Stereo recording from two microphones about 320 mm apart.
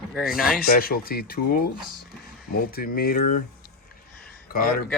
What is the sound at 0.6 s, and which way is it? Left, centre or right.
Speech, left.